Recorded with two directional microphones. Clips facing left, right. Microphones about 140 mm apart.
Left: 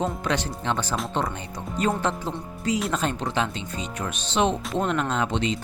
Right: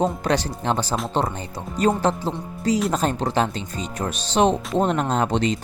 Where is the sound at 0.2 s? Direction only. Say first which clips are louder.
Right 4 dB; 35° right (ahead or behind).